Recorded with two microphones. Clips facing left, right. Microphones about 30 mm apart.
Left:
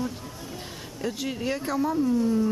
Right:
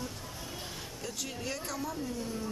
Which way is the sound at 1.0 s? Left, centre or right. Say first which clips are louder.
Left 11 dB; left.